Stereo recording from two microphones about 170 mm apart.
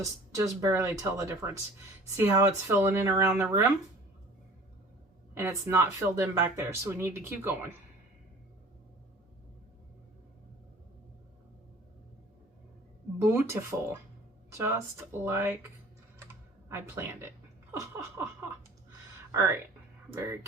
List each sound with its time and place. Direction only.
0.0 s speech: 20° right (ahead or behind)
5.4 s speech: 15° right (ahead or behind)
13.2 s a woman's voice: 15° right (ahead or behind)
16.6 s speech: 15° right (ahead or behind)
19.3 s speech: 15° right (ahead or behind)